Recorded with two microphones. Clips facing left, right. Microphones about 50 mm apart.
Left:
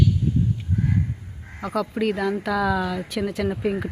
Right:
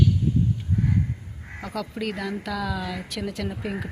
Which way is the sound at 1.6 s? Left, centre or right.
Centre.